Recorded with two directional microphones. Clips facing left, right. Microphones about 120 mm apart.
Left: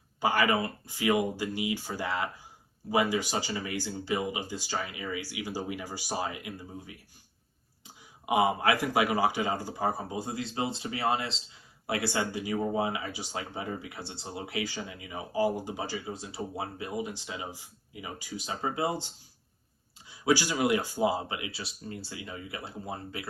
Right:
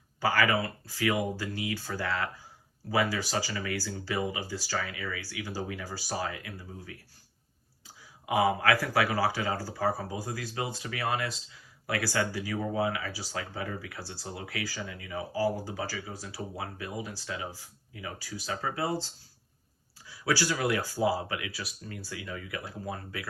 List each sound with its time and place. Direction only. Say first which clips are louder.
0.2 s speech: even; 20° left (ahead or behind)